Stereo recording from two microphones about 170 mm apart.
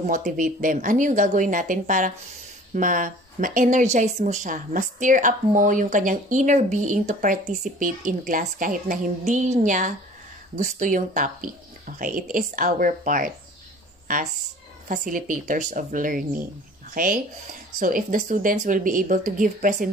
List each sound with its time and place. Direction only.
0.0 s speech: 50° right (ahead or behind)